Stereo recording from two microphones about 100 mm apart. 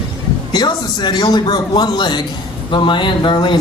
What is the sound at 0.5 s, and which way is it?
Speech, 45° left (ahead or behind).